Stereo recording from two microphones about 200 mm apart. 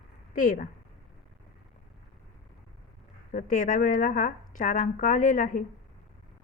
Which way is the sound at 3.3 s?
40° left (ahead or behind).